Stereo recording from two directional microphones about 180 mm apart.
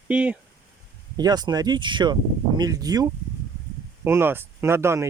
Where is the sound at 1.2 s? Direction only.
20° right (ahead or behind).